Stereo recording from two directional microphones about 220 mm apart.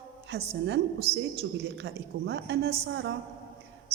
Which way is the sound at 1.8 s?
50° right (ahead or behind).